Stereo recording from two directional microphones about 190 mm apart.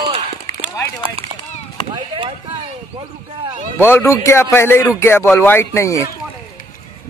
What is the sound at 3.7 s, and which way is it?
Speech, 10° left (ahead or behind).